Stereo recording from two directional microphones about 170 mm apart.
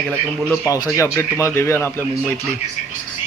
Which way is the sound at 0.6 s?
20° left (ahead or behind).